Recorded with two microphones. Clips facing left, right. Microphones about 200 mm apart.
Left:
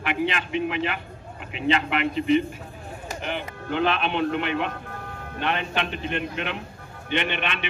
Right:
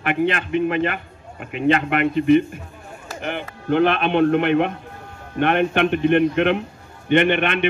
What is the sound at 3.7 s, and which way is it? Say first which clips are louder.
A man's voice: right 7 dB; 55° right (ahead or behind).